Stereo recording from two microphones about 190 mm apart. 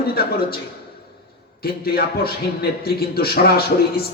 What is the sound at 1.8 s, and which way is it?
A man's voice, 55° left (ahead or behind).